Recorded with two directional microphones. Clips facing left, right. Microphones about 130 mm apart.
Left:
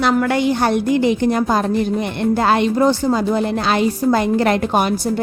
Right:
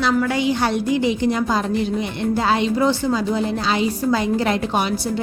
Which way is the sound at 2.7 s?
45° left (ahead or behind).